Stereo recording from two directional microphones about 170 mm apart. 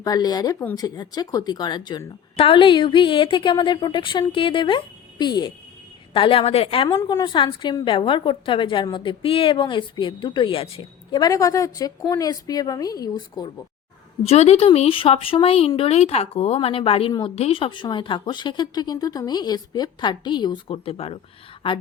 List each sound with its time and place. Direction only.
0.0 s a woman's voice: 25° left (ahead or behind)
14.3 s a woman's voice: 40° left (ahead or behind)